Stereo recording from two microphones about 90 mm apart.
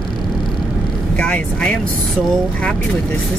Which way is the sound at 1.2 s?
15° left (ahead or behind).